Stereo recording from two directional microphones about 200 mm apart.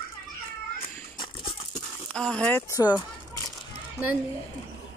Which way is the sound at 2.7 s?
15° left (ahead or behind).